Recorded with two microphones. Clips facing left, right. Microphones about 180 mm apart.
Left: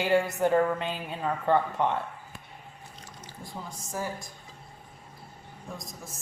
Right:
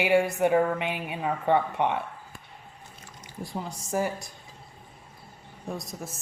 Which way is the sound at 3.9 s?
70° right (ahead or behind).